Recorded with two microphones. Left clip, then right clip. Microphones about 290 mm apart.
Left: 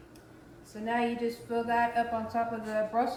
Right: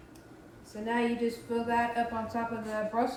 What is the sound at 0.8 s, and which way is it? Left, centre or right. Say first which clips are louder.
Speech: even; centre.